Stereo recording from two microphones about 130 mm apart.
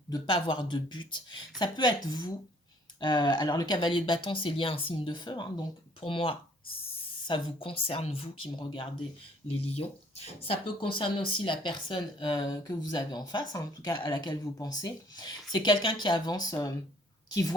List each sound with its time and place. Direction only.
0.1 s speech: 35° left (ahead or behind)
3.0 s speech: 35° left (ahead or behind)
9.7 s speech: 50° left (ahead or behind); by 16.7 s 30° left (ahead or behind)